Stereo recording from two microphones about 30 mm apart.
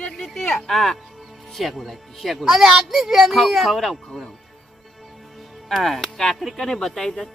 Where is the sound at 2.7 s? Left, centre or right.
Centre.